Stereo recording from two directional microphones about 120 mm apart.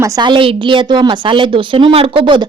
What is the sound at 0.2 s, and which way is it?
A woman's voice, 45° right (ahead or behind).